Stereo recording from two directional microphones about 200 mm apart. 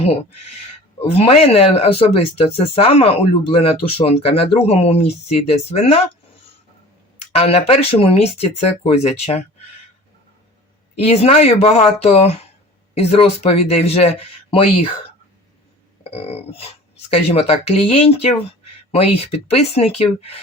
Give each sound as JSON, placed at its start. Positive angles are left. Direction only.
{"t": 0.9, "sound": "speech", "side_deg": 30}
{"t": 7.3, "sound": "speech", "side_deg": 30}
{"t": 10.9, "sound": "speech", "side_deg": 30}
{"t": 16.0, "sound": "speech", "side_deg": 30}